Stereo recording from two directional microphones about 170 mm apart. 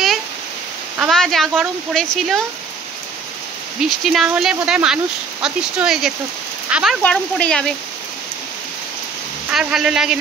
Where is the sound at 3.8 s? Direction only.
Centre (ahead or behind).